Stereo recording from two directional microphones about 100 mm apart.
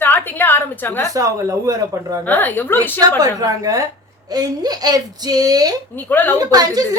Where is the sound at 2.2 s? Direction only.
20° left (ahead or behind).